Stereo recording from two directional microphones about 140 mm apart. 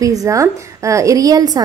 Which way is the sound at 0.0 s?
25° right (ahead or behind).